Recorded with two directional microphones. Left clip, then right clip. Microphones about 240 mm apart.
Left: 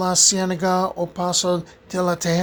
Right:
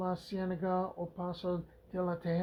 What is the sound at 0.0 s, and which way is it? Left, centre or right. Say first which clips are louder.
Speech: left 18 dB; left.